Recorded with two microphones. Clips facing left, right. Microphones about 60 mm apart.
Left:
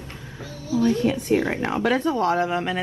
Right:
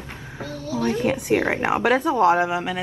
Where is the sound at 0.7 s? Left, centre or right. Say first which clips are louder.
Left 2 dB; right.